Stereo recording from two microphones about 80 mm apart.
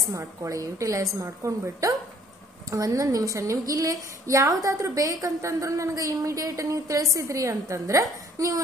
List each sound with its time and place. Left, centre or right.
0.1 s a woman's voice: right